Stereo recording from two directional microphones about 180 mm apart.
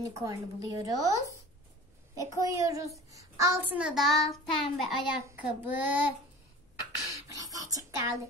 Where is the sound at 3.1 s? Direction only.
15° right (ahead or behind).